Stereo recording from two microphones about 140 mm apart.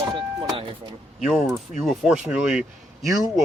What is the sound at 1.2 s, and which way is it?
Speech, centre (ahead or behind).